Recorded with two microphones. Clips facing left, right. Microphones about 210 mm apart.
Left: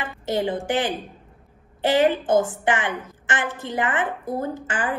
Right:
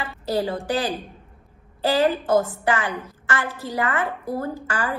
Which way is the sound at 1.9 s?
25° left (ahead or behind).